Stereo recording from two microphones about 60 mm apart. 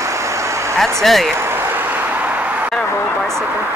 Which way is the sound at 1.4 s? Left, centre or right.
Right.